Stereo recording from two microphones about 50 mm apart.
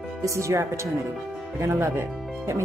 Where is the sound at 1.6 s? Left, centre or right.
Right.